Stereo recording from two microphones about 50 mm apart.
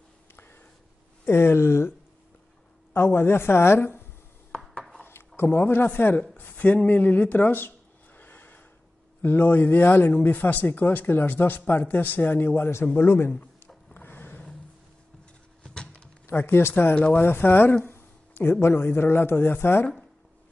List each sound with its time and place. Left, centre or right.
1.2 s a woman's voice: left
4.5 s chopping: centre
5.0 s a sound: left
9.2 s a man's voice: left
13.9 s a sound: left
15.6 s a sound: centre
16.3 s a woman's voice: left
16.9 s speech: left
17.2 s a woman's voice: left
17.8 s a man's voice: left